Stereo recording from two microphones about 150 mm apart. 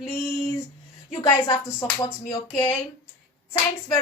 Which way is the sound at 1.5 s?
25° left (ahead or behind).